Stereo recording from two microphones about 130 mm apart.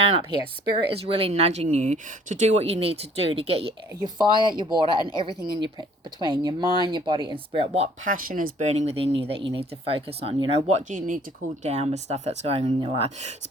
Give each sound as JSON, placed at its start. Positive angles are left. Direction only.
{"t": 0.0, "sound": "speech", "side_deg": -50}
{"t": 1.6, "sound": "speech", "side_deg": -70}
{"t": 4.0, "sound": "speech", "side_deg": -35}
{"t": 8.0, "sound": "speech", "side_deg": -90}
{"t": 11.6, "sound": "speech", "side_deg": -55}
{"t": 12.6, "sound": "speech", "side_deg": -45}